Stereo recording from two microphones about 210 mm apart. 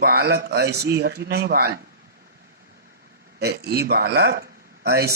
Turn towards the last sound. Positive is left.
turn(degrees=-50)  # may be behind; listen again after turning